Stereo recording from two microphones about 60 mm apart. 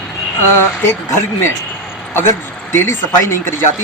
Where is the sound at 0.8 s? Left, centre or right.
Left.